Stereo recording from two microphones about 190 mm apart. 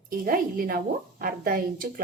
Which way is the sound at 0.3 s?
50° right (ahead or behind).